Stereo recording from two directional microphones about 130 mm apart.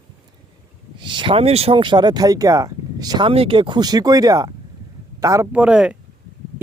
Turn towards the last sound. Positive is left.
turn(degrees=-5)  # may be behind; listen again after turning